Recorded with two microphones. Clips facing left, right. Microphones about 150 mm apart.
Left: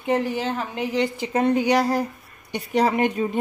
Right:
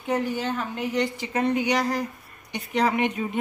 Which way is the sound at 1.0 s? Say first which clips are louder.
Left 6 dB; 25° left (ahead or behind).